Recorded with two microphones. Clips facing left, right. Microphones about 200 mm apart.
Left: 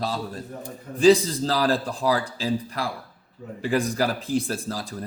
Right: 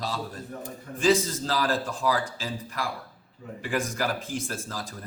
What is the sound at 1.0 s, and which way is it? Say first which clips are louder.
A man's voice: left 6 dB; 35° left (ahead or behind).